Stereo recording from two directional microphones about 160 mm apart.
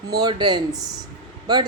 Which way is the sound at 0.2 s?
25° right (ahead or behind).